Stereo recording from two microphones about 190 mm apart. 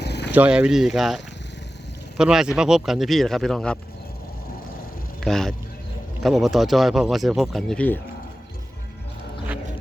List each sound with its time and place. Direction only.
0.0 s a sound: 60° left (ahead or behind)
0.3 s speech: 5° right (ahead or behind)
5.2 s speech: centre (ahead or behind)